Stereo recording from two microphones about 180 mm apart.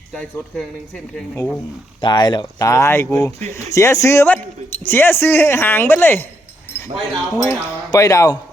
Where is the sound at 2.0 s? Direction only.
25° left (ahead or behind).